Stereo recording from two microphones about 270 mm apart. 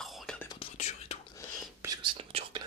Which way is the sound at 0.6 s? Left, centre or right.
Left.